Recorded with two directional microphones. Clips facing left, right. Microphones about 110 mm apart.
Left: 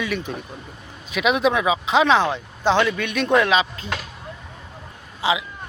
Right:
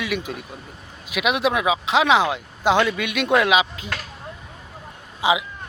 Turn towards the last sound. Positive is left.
turn(degrees=-15)  # may be behind; listen again after turning